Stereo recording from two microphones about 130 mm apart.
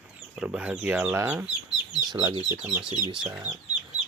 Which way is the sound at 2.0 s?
35° right (ahead or behind).